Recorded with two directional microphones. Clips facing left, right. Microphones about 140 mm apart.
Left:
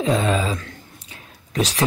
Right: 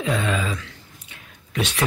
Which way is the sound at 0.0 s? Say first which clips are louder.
Left 4 dB; 35° left (ahead or behind).